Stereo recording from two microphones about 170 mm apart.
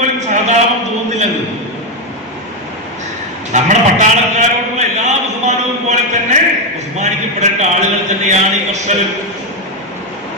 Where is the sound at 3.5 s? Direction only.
45° right (ahead or behind).